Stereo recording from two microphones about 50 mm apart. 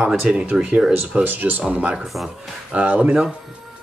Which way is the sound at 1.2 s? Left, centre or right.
Right.